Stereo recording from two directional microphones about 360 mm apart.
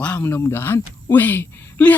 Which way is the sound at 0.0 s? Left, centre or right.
Centre.